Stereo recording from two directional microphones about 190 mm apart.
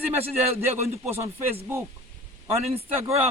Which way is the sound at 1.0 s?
10° right (ahead or behind).